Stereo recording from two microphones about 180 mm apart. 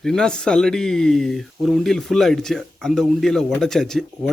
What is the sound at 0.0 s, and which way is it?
Speech, 5° left (ahead or behind).